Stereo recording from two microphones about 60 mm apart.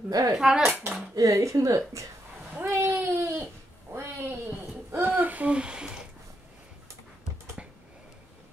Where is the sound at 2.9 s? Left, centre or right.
Right; by 6.0 s centre.